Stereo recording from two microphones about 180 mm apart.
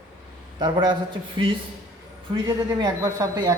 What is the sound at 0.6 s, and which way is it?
Speech, 25° right (ahead or behind).